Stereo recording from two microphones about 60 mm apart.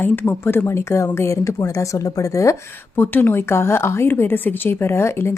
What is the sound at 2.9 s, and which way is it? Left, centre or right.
Speech, left.